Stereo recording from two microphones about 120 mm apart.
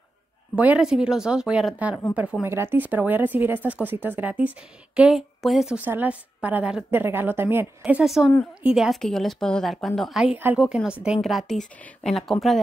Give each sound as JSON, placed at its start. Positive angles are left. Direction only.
{"t": 0.6, "sound": "a woman's voice", "side_deg": -10}
{"t": 2.4, "sound": "a woman's voice", "side_deg": -20}
{"t": 5.8, "sound": "speech", "side_deg": -15}
{"t": 7.8, "sound": "a woman's voice", "side_deg": -5}
{"t": 10.3, "sound": "speech", "side_deg": -15}
{"t": 10.6, "sound": "a woman's voice", "side_deg": -5}